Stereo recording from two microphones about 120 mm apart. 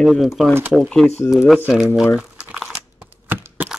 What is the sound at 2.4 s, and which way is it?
Crumpling, 5° right (ahead or behind).